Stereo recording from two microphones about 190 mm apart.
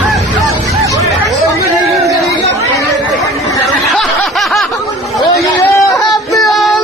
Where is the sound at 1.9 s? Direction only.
15° right (ahead or behind).